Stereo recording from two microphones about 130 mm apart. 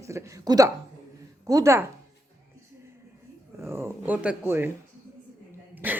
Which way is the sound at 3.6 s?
20° right (ahead or behind).